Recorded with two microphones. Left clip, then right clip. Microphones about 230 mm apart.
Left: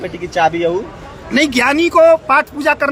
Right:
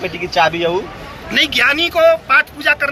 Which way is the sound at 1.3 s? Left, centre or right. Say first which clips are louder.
Even; left.